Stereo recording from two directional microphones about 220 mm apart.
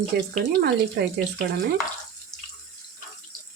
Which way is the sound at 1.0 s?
45° right (ahead or behind).